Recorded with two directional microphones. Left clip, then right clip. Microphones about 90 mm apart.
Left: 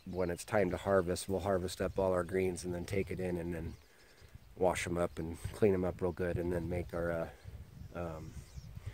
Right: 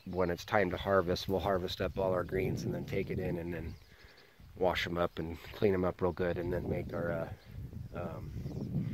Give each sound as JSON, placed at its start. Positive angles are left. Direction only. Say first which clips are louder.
{"t": 0.1, "sound": "speech", "louder": "right 3 dB", "side_deg": 20}